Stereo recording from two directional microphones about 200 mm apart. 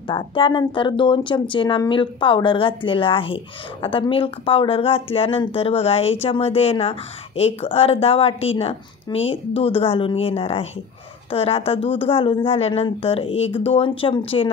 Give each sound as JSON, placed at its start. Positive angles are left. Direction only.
{"t": 0.1, "sound": "speech", "side_deg": 25}